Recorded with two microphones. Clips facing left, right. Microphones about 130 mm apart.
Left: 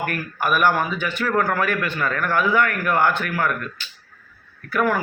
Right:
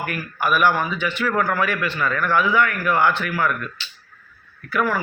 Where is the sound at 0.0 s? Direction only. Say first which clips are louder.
Even; 50° left (ahead or behind).